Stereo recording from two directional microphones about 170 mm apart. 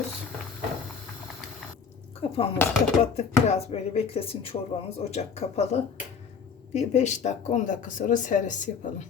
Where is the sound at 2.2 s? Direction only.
35° left (ahead or behind).